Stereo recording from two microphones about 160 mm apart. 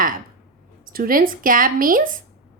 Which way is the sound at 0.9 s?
65° right (ahead or behind).